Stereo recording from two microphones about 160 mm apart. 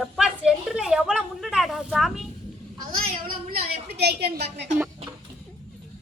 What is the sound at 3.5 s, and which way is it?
A woman's voice, 90° right.